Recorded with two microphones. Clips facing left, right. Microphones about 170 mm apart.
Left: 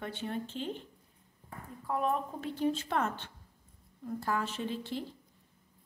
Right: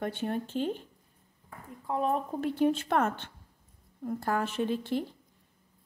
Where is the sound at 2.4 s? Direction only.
60° right (ahead or behind).